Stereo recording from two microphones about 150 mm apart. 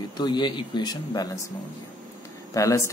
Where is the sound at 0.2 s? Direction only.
30° left (ahead or behind).